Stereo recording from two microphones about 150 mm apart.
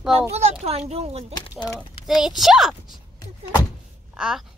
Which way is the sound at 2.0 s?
Centre (ahead or behind).